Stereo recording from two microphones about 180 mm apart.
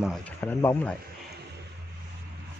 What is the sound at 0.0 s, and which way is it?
Speech, 5° left (ahead or behind).